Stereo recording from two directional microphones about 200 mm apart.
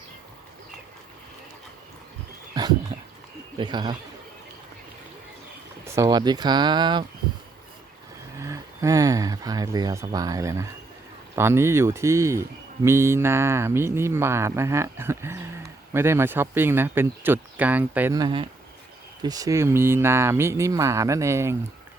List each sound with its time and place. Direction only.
2.6 s dog: 20° right (ahead or behind)
3.6 s speech: 20° right (ahead or behind)
5.8 s speech: 15° right (ahead or behind)
8.4 s speech: 15° right (ahead or behind)